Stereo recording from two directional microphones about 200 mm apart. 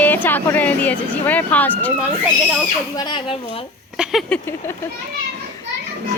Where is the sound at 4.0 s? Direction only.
Centre (ahead or behind).